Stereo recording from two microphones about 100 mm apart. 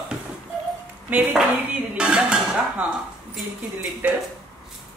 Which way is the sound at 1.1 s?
15° right (ahead or behind).